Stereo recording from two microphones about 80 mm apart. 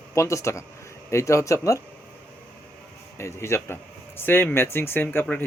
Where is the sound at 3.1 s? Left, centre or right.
Left.